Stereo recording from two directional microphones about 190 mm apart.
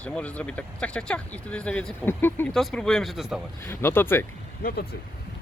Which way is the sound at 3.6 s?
10° left (ahead or behind).